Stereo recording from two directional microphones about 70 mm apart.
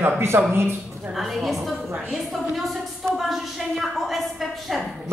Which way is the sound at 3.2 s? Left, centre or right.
Centre.